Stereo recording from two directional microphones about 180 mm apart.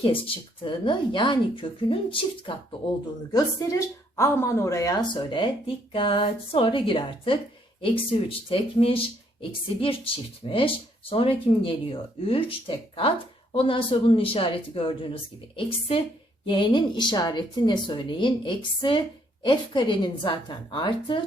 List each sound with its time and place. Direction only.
0.0 s a woman's voice: 30° left (ahead or behind)